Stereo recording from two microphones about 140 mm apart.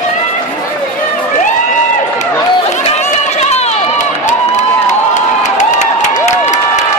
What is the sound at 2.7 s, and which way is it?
Run, 55° left (ahead or behind).